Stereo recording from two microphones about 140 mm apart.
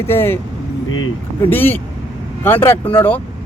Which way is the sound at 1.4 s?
15° left (ahead or behind).